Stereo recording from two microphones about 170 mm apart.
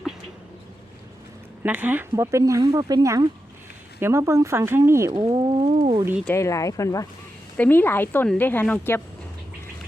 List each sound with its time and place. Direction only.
1.6 s speech: 10° right (ahead or behind); by 6.0 s 35° right (ahead or behind)
6.2 s a woman's voice: 15° left (ahead or behind)